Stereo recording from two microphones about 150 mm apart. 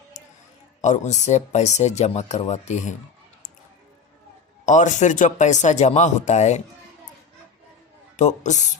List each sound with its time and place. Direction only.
0.1 s a sound: 50° left (ahead or behind)
0.8 s speech: 50° left (ahead or behind)
4.6 s speech: 55° left (ahead or behind)
8.1 s speech: 50° left (ahead or behind)